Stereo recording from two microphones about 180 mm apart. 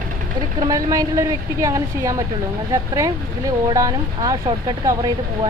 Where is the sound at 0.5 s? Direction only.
20° right (ahead or behind).